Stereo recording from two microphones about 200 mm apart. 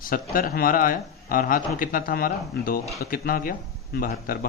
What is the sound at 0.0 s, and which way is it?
Speech, 45° left (ahead or behind).